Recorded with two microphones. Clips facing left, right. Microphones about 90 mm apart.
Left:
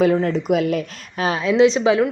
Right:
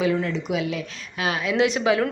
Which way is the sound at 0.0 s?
40° left (ahead or behind).